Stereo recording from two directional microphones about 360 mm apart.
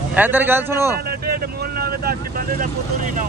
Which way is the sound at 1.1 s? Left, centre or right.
Right.